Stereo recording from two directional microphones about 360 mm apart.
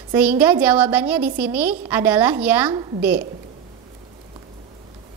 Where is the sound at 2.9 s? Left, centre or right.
Right.